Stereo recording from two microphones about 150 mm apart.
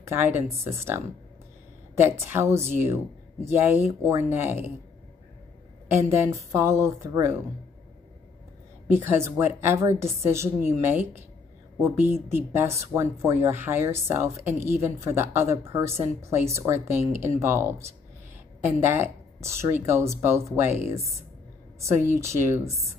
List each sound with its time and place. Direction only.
0.0 s speech: 15° right (ahead or behind)
6.5 s speech: 20° right (ahead or behind)
8.9 s speech: 15° right (ahead or behind)
21.8 s speech: 20° right (ahead or behind)